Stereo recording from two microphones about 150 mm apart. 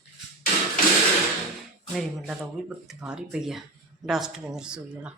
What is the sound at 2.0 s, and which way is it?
A woman's voice, centre (ahead or behind).